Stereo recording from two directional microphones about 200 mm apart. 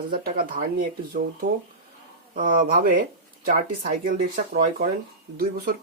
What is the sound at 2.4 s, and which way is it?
Speech, 45° right (ahead or behind).